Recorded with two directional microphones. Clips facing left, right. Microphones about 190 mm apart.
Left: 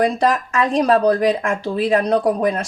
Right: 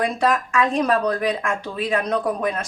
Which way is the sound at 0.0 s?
35° left (ahead or behind).